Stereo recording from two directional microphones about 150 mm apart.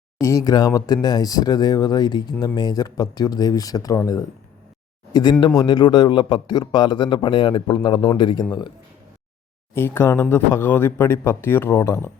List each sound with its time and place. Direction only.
0.2 s a man's voice: 20° left (ahead or behind)
9.7 s speech: 15° left (ahead or behind)